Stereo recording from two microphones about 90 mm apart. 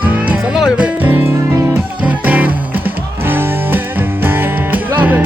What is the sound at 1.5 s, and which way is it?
Music, 35° right (ahead or behind).